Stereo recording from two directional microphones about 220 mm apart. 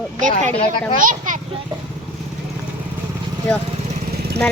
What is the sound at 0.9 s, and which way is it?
Speech, 35° right (ahead or behind).